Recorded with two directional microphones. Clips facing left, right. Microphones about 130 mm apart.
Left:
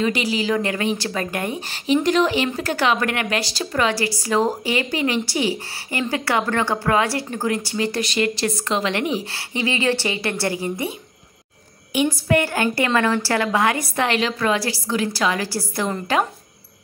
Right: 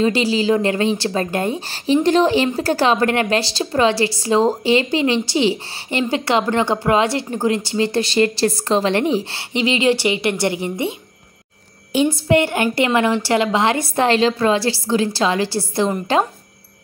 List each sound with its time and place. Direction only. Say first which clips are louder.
0.0 s a woman's voice: right 5 dB; 30° right (ahead or behind)